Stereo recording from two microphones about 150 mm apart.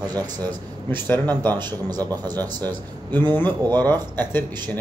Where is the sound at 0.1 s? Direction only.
25° right (ahead or behind).